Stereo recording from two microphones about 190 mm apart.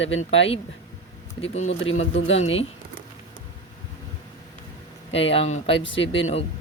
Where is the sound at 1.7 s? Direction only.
90° left.